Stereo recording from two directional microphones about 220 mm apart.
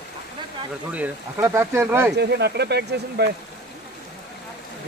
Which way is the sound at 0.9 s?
10° right (ahead or behind).